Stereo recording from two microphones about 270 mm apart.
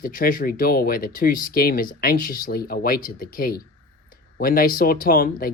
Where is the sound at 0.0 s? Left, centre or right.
Left.